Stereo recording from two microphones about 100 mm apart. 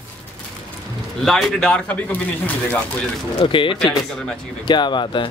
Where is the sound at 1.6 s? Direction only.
10° left (ahead or behind).